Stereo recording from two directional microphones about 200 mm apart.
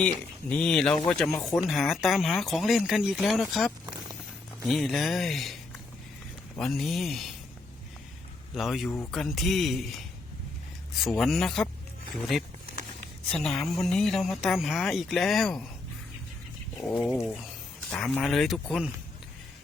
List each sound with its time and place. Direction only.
0.0 s speech: 5° left (ahead or behind)
6.6 s speech: centre (ahead or behind)
8.5 s speech: centre (ahead or behind)
16.7 s speech: 5° left (ahead or behind)